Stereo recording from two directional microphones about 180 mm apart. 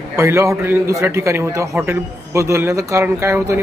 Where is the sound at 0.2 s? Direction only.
15° right (ahead or behind).